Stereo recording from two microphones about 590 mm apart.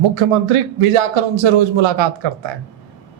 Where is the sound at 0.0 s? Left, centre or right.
Right.